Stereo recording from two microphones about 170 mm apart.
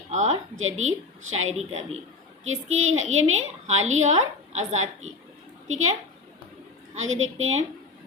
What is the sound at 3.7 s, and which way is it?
Speech, 40° right (ahead or behind).